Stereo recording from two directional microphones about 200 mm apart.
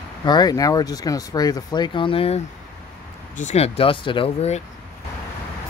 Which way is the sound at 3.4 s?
35° left (ahead or behind).